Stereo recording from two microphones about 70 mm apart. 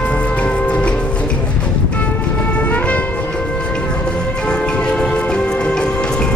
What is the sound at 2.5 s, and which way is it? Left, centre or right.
Music, centre.